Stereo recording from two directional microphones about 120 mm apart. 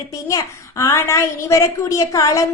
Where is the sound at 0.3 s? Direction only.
25° left (ahead or behind).